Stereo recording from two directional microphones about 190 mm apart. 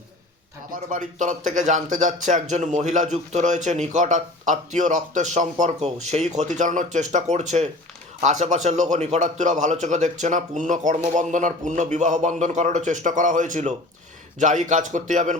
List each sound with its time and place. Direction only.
0.7 s speech: 40° right (ahead or behind)